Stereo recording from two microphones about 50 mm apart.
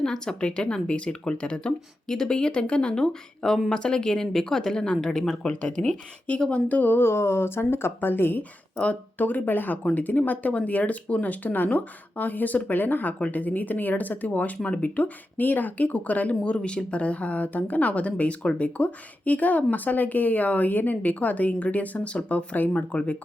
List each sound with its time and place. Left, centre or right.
0.0 s speech: centre
6.7 s speech: left
8.8 s speech: left
16.3 s a woman's voice: centre
22.5 s a woman's voice: left